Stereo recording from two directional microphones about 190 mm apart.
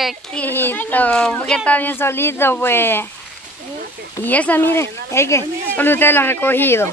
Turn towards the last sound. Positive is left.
turn(degrees=10)  # may be behind; listen again after turning